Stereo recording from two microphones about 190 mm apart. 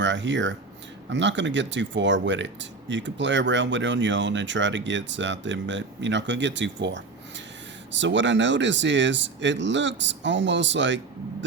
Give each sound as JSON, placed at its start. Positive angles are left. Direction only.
{"t": 0.0, "sound": "speech", "side_deg": -70}